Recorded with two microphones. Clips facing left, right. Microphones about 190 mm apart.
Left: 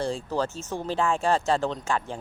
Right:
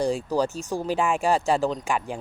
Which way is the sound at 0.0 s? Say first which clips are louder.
Right 4 dB; 15° right (ahead or behind).